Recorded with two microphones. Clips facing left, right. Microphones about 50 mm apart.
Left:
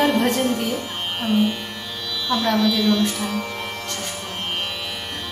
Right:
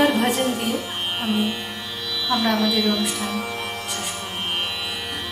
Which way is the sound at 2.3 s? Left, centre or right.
Centre.